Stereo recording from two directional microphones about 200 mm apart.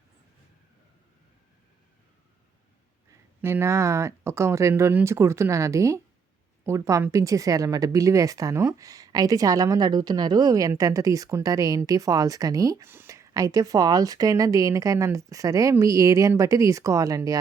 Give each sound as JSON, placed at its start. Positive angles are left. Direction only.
{"t": 3.4, "sound": "speech", "side_deg": -15}